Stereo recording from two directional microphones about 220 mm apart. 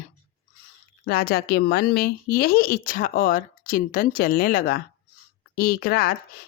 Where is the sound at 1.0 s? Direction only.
45° left (ahead or behind).